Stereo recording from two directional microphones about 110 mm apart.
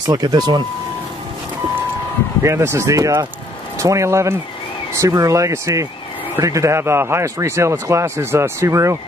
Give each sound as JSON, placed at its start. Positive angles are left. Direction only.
{"t": 0.0, "sound": "speech", "side_deg": -35}
{"t": 2.4, "sound": "speech", "side_deg": -25}